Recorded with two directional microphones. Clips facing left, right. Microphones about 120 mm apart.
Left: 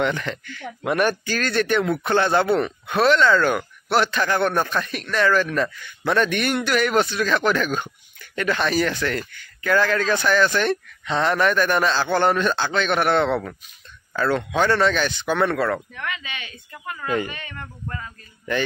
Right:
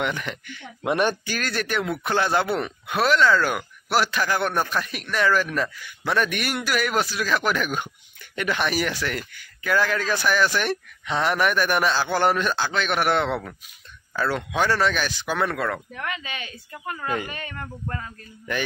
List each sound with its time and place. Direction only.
0.0 s a man's voice: 10° right (ahead or behind)
15.9 s speech: 35° right (ahead or behind)